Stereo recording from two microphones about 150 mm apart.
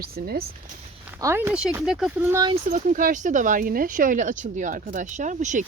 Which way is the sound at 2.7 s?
60° right (ahead or behind).